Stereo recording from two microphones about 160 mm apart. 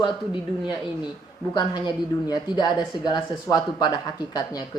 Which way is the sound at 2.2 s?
25° left (ahead or behind).